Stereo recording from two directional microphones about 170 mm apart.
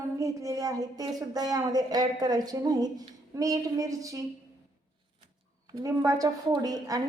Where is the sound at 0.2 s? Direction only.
20° right (ahead or behind).